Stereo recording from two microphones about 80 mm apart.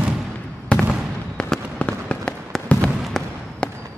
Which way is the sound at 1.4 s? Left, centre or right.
Centre.